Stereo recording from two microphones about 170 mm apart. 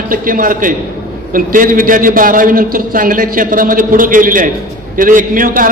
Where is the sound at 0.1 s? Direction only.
55° right (ahead or behind).